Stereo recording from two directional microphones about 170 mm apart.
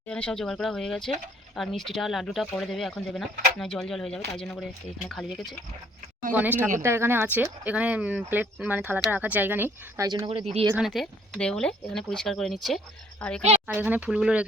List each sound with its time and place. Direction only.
0.1 s speech: 5° left (ahead or behind)
6.3 s speech: 10° right (ahead or behind)
10.8 s a woman's voice: centre (ahead or behind)
13.7 s speech: 10° right (ahead or behind)